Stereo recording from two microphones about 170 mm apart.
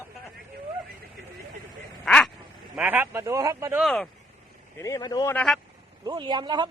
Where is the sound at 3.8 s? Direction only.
Centre (ahead or behind).